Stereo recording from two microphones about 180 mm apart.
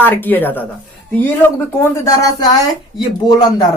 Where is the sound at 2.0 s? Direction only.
20° left (ahead or behind).